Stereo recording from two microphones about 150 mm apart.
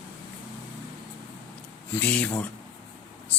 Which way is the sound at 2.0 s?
10° left (ahead or behind).